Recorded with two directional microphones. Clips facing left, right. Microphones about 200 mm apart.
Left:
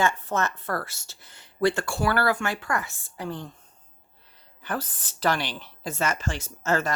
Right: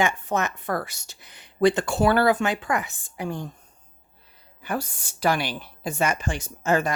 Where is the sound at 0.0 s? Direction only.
15° right (ahead or behind).